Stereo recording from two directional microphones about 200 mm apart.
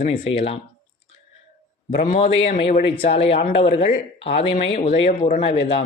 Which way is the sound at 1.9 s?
45° left (ahead or behind).